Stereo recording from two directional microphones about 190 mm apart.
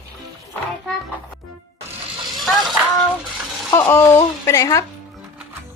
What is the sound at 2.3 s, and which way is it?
Music, centre (ahead or behind).